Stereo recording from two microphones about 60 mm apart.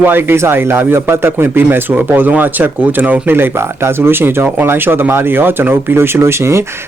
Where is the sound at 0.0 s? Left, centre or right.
Right.